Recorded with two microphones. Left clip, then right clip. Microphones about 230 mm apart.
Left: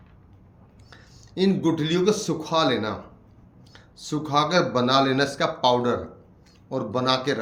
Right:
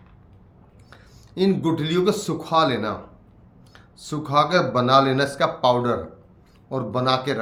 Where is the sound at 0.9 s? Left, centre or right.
Centre.